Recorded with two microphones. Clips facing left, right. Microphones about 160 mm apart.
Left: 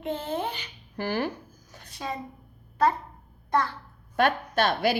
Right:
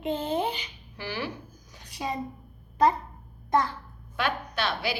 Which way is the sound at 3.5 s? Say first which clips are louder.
Right 1 dB; 20° right (ahead or behind).